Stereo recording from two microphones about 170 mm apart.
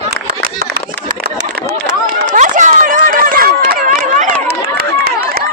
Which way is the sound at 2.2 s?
45° right (ahead or behind).